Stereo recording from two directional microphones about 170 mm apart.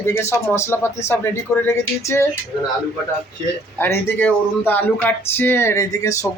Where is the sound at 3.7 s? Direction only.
15° left (ahead or behind).